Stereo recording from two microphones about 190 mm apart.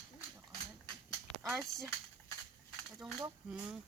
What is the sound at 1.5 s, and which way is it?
Speech, centre (ahead or behind).